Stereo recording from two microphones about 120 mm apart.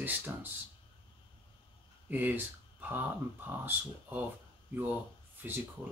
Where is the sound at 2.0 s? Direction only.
15° right (ahead or behind).